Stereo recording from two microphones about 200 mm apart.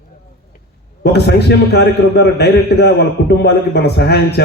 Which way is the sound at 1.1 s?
55° left (ahead or behind).